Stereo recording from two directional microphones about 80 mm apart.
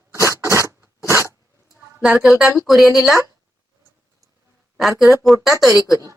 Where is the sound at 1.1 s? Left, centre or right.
Right.